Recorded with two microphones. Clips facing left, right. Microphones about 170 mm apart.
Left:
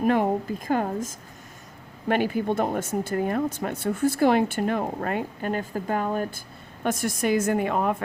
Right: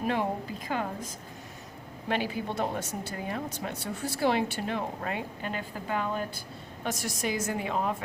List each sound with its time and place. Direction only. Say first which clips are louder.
0.0 s speech: left 7 dB; 50° left (ahead or behind)